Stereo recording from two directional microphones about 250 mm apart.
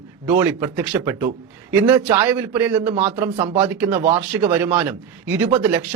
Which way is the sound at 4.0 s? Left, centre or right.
Right.